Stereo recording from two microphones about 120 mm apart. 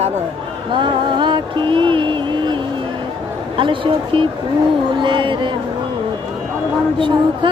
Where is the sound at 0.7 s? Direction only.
40° right (ahead or behind).